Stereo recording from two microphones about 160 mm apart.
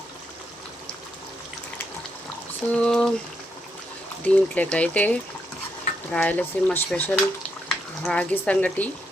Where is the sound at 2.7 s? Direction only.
5° left (ahead or behind).